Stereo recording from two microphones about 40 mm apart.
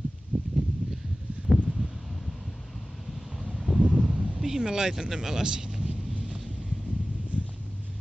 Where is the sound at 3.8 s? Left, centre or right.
Right.